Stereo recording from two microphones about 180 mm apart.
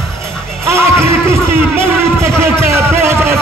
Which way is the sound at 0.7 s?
15° right (ahead or behind).